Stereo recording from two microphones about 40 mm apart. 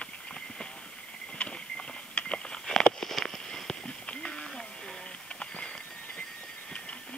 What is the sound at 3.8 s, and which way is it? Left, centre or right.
Clip-clop, left.